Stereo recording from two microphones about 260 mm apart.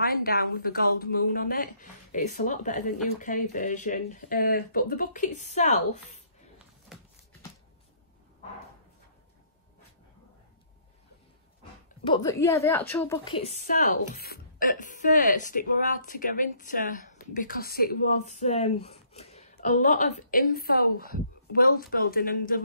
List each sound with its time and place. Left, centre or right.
0.0 s speech: left
12.0 s a woman's voice: centre
14.1 s speech: left